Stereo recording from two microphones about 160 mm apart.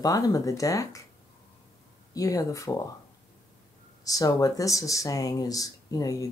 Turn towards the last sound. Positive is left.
turn(degrees=20)  # may be behind; listen again after turning